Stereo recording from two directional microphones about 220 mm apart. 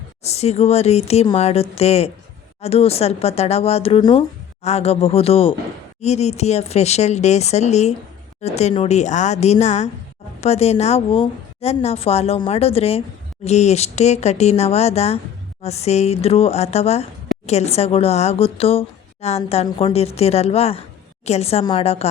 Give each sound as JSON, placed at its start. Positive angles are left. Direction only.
{"t": 0.2, "sound": "a woman's voice", "side_deg": 30}